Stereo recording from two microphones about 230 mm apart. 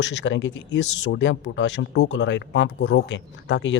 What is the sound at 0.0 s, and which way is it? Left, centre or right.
Speech, left.